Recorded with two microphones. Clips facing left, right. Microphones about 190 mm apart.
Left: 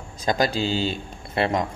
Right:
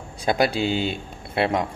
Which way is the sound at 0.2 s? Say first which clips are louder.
Right 1 dB; 10° right (ahead or behind).